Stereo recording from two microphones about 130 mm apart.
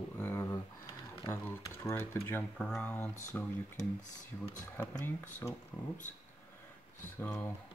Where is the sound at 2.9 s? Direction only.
15° left (ahead or behind).